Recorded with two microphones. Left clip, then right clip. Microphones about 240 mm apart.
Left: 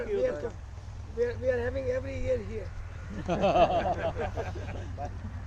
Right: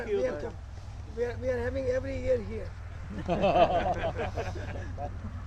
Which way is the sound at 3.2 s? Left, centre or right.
Centre.